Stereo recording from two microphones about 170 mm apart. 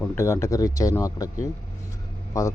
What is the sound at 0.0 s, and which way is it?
Speech, 15° left (ahead or behind).